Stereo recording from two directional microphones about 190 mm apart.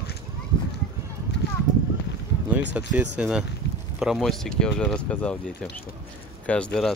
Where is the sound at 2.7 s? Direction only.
10° right (ahead or behind).